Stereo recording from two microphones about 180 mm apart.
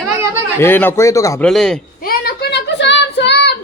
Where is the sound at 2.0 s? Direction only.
55° left (ahead or behind).